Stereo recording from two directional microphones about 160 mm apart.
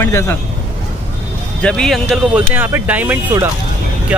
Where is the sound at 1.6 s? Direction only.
5° left (ahead or behind).